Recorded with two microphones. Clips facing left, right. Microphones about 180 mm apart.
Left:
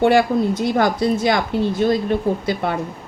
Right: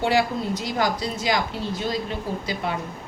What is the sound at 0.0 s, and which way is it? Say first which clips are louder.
A woman's voice: left 7 dB; 55° left (ahead or behind).